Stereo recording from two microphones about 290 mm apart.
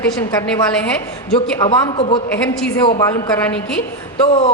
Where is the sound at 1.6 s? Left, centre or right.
Centre.